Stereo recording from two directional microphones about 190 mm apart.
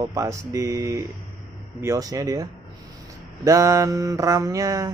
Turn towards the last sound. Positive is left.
turn(degrees=-20)  # may be behind; listen again after turning